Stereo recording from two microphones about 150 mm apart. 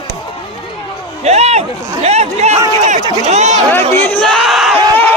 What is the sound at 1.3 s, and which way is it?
Speech, 45° right (ahead or behind).